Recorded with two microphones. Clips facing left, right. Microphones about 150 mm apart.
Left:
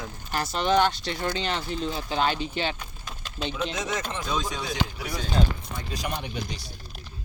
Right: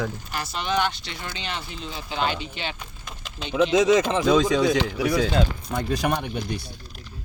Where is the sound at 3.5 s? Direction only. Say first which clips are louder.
Right 14 dB; 90° right.